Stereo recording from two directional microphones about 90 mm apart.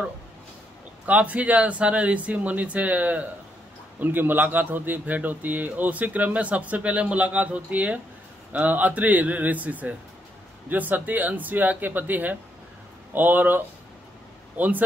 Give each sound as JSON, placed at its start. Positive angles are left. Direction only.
{"t": 1.0, "sound": "speech", "side_deg": -15}